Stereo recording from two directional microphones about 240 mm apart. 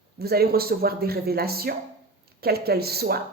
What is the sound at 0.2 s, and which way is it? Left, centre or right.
Speech, right.